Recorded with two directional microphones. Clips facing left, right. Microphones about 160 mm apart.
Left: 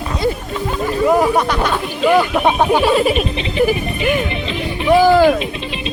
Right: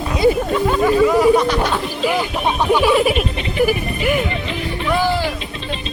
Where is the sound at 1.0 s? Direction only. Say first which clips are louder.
Left 2 dB; 50° left (ahead or behind).